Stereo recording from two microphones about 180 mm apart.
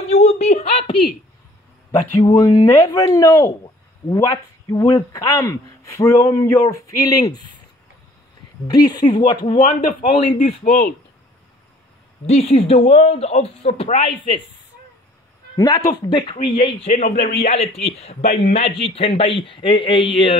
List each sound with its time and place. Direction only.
0.1 s a sound: 40° left (ahead or behind)
1.9 s speech: 20° left (ahead or behind)
8.6 s speech: 20° left (ahead or behind)
9.5 s speech: 50° left (ahead or behind)
12.3 s speech: 35° left (ahead or behind)
15.5 s speech: 20° left (ahead or behind)
16.8 s speech: 35° left (ahead or behind)
17.1 s a man's voice: 60° left (ahead or behind)
18.9 s speech: 30° left (ahead or behind)